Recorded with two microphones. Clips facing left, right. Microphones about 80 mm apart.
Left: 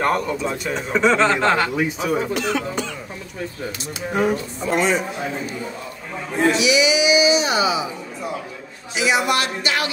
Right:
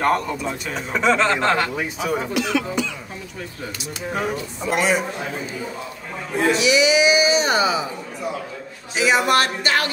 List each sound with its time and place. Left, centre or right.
0.0 s speech: centre
2.3 s speech: left
4.1 s speech: centre
4.6 s a man's voice: centre
6.6 s speech: right
8.9 s music: right